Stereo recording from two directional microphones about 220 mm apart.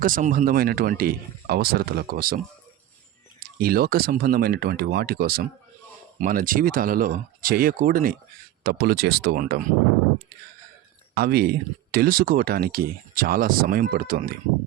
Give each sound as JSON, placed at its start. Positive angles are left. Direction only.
{"t": 0.0, "sound": "speech", "side_deg": -40}
{"t": 3.6, "sound": "speech", "side_deg": -40}
{"t": 11.1, "sound": "speech", "side_deg": -45}